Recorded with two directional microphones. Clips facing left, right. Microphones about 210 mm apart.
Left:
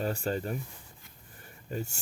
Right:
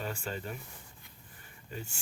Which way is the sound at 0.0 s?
40° left (ahead or behind).